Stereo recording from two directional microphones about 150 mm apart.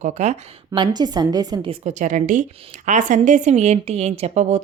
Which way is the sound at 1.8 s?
55° right (ahead or behind).